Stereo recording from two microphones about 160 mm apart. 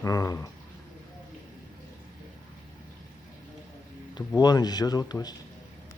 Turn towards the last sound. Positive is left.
turn(degrees=25)  # may be behind; listen again after turning